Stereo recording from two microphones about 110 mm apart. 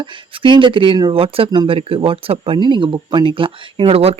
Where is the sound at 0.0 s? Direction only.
50° right (ahead or behind).